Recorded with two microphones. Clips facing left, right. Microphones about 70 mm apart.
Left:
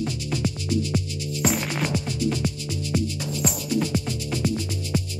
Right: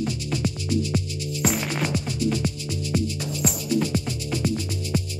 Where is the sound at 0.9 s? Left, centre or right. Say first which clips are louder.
Even; centre.